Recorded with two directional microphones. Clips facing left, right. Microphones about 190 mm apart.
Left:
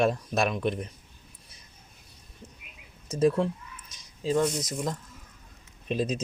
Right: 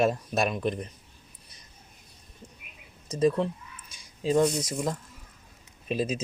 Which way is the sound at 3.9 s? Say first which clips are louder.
Right 2 dB; 10° right (ahead or behind).